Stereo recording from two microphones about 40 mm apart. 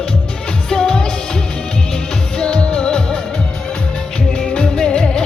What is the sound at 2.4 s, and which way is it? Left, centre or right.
Music, left.